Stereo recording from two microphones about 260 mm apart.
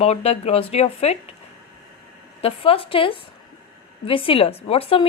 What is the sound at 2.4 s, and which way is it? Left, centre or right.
A woman's voice, left.